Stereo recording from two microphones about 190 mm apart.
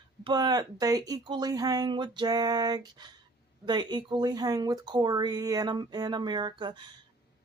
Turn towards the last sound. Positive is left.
turn(degrees=-25)  # may be behind; listen again after turning